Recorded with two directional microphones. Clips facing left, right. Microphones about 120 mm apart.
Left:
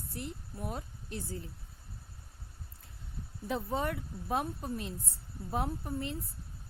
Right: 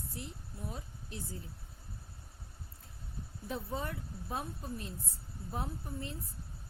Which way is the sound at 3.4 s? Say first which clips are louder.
Left 5 dB; 80° left.